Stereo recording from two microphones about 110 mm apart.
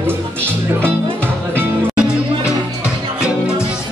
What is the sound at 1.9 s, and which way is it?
Music, 10° right (ahead or behind).